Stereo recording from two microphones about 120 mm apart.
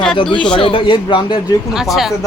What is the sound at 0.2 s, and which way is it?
A man's voice, 45° left (ahead or behind).